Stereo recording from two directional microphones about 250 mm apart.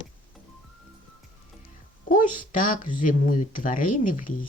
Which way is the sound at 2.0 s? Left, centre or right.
Left.